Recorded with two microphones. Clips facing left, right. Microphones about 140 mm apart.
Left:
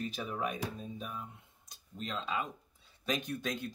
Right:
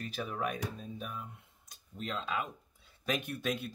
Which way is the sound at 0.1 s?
Centre (ahead or behind).